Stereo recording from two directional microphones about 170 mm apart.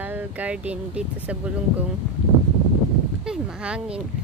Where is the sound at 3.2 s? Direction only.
5° right (ahead or behind).